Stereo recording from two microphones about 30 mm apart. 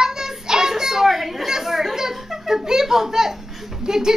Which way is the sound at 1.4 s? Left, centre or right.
Centre.